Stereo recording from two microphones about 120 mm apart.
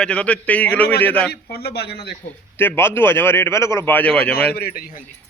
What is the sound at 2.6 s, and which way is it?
A man's voice, 20° left (ahead or behind).